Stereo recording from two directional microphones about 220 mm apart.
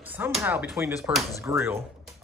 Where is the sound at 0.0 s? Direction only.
10° right (ahead or behind).